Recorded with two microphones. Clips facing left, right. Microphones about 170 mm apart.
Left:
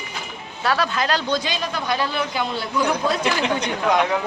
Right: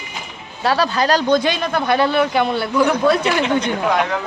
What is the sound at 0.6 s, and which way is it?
A man's voice, 30° right (ahead or behind).